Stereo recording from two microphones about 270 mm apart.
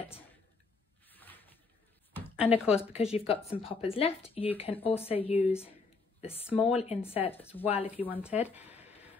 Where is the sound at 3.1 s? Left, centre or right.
Left.